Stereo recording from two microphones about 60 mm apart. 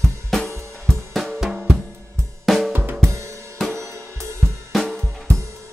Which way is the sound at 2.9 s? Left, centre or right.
Right.